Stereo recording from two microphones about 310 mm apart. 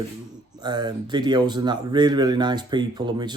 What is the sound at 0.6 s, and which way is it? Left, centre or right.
Speech, centre.